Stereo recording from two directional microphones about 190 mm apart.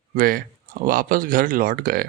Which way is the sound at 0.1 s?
50° right (ahead or behind).